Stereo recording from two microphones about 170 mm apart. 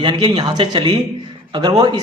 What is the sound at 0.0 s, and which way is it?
Speech, 25° right (ahead or behind).